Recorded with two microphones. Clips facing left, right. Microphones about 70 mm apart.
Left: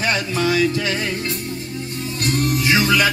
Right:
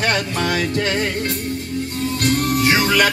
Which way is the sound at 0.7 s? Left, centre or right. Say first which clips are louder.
Right 2 dB; right.